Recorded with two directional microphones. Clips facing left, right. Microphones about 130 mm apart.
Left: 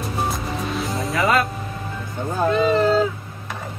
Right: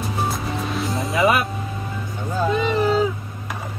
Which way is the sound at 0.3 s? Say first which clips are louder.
Even; centre (ahead or behind).